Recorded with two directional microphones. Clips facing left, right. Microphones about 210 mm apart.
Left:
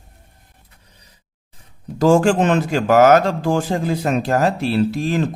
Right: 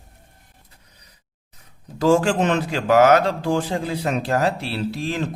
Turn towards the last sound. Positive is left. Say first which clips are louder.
# left 7 dB
turn(degrees=45)  # may be behind; listen again after turning